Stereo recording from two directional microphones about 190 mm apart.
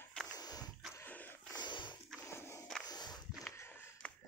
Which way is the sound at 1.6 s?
25° left (ahead or behind).